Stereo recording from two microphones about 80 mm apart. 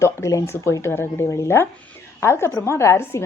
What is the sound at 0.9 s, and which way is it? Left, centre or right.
Speech, left.